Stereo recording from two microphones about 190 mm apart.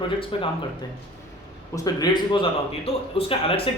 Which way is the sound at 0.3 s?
30° left (ahead or behind).